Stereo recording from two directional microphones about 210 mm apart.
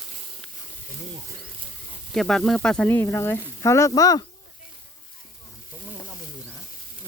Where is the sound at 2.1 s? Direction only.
Centre (ahead or behind).